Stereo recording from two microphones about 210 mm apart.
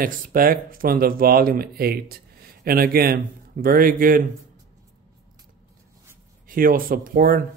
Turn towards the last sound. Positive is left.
turn(degrees=-40)  # may be behind; listen again after turning